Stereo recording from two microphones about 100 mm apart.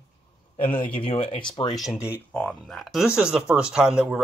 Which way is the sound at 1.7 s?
Centre (ahead or behind).